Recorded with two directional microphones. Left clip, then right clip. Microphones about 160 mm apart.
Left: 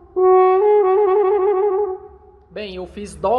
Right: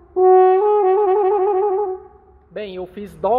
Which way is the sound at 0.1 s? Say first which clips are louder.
Right 1 dB; 15° right (ahead or behind).